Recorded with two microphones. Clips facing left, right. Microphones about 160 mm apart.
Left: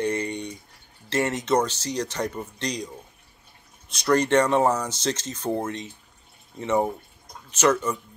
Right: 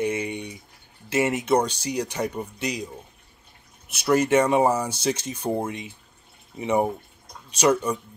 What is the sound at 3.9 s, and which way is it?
Speech, 10° right (ahead or behind).